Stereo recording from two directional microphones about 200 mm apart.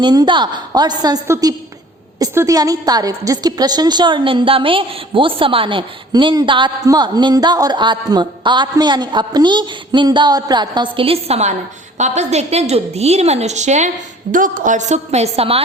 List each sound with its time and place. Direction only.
0.0 s a woman's voice: 20° right (ahead or behind)